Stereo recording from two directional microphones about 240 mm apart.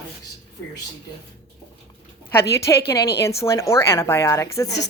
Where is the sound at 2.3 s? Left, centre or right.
Centre.